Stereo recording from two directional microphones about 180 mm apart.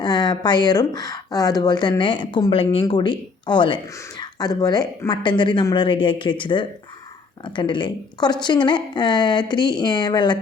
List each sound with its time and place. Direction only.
0.0 s speech: 25° left (ahead or behind)